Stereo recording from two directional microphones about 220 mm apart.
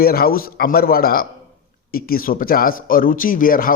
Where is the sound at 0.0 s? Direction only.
45° left (ahead or behind).